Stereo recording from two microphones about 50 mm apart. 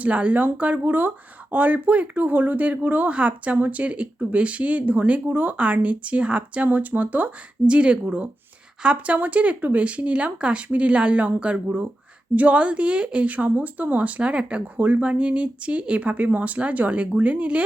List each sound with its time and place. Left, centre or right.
0.0 s speech: right